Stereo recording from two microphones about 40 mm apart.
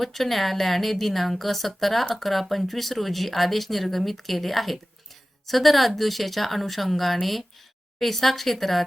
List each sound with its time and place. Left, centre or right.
0.0 s a woman's voice: centre